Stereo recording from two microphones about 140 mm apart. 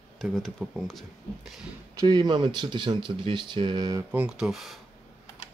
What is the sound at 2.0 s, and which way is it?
Speech, 30° right (ahead or behind).